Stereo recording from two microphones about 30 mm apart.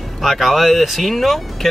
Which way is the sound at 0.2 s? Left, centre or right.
Centre.